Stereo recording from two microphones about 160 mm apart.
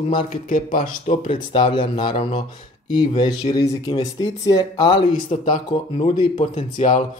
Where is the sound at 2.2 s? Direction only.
40° left (ahead or behind).